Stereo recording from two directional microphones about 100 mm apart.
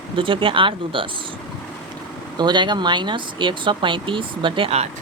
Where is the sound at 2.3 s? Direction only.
50° right (ahead or behind).